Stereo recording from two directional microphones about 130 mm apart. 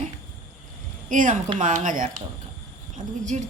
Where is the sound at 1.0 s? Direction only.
90° right.